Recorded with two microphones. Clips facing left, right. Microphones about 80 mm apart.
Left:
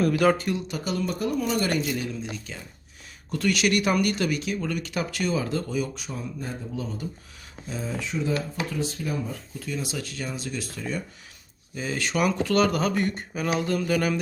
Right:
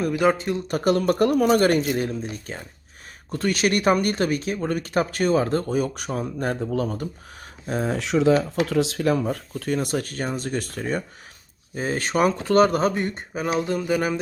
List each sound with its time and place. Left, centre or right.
0.0 s speech: centre
0.7 s speech: right
1.8 s speech: right